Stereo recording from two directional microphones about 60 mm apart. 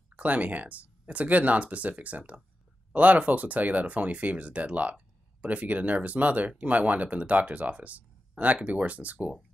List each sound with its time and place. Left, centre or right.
0.1 s speech: right